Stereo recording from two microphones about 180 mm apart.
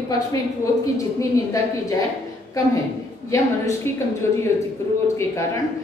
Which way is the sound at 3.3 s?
15° left (ahead or behind).